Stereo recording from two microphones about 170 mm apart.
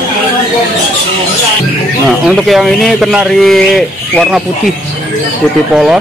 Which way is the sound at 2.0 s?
Centre (ahead or behind).